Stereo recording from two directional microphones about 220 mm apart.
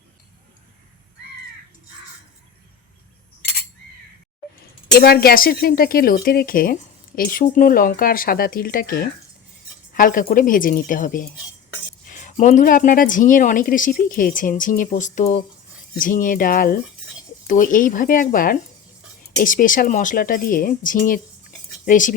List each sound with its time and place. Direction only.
4.9 s speech: 45° left (ahead or behind)